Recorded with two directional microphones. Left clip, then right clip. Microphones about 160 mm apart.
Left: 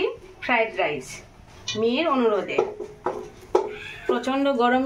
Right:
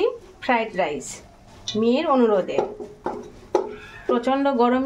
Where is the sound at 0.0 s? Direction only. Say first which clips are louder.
Right 4 dB; 90° right.